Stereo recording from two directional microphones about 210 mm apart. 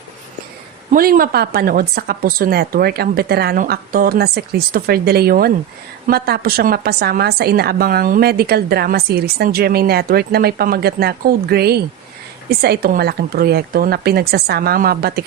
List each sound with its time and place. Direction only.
0.9 s a woman's voice: 40° right (ahead or behind)